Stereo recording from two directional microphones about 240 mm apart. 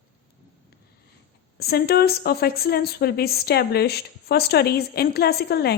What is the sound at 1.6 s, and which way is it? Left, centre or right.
A woman's voice, left.